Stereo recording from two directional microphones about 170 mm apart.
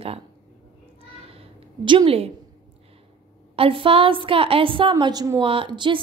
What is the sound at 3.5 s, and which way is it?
A woman's voice, 30° right (ahead or behind).